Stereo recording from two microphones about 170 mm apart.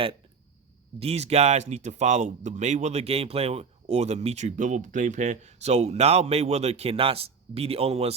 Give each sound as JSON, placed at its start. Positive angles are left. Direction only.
{"t": 0.9, "sound": "speech", "side_deg": -35}